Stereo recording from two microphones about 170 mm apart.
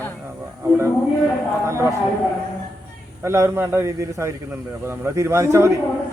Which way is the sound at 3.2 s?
15° right (ahead or behind).